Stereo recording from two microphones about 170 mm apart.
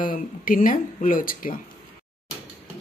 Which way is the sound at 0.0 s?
55° left (ahead or behind).